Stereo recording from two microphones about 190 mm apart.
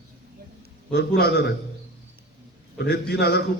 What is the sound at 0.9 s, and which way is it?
Speech, 60° left (ahead or behind).